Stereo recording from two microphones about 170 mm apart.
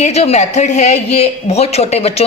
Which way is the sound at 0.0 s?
40° left (ahead or behind).